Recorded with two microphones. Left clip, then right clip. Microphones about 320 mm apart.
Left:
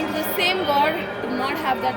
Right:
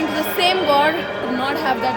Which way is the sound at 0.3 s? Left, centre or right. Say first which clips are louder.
Right 4 dB; centre.